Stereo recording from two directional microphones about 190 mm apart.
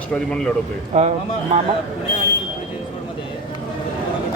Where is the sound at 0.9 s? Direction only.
35° right (ahead or behind).